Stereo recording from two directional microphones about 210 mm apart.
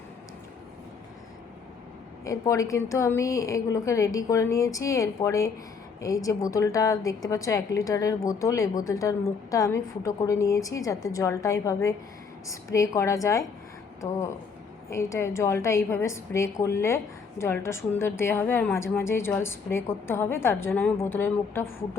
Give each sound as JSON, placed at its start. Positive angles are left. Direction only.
{"t": 2.2, "sound": "a woman's voice", "side_deg": 15}
{"t": 14.8, "sound": "a woman's voice", "side_deg": 15}